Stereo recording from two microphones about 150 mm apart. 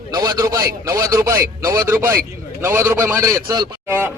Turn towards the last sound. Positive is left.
turn(degrees=-15)  # may be behind; listen again after turning